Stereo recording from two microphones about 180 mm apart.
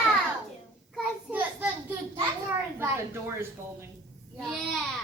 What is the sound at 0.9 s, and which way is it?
Speech, 10° right (ahead or behind).